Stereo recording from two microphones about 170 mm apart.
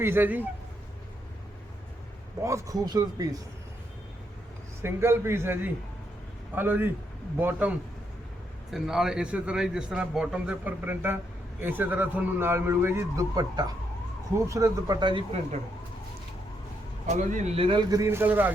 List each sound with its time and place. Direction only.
0.0 s a man's voice: 10° right (ahead or behind)
2.4 s speech: 15° right (ahead or behind)
4.8 s a man's voice: 15° right (ahead or behind)
8.7 s a man's voice: 5° right (ahead or behind); by 15.4 s 30° right (ahead or behind)
17.1 s speech: 45° right (ahead or behind); by 18.0 s 30° right (ahead or behind)
18.0 s a man's voice: 15° right (ahead or behind)